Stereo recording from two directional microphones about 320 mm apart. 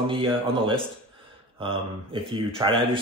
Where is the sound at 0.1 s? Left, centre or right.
Centre.